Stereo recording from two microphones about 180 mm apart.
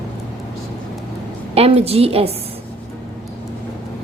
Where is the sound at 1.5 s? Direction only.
35° right (ahead or behind).